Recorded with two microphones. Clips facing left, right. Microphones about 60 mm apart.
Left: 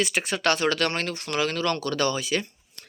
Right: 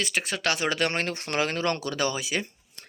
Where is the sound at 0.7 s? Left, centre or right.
Centre.